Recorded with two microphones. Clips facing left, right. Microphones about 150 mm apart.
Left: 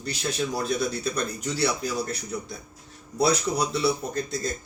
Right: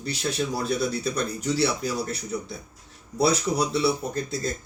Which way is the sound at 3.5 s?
5° right (ahead or behind).